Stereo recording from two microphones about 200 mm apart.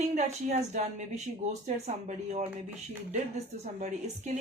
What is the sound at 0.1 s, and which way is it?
Speech, 35° right (ahead or behind).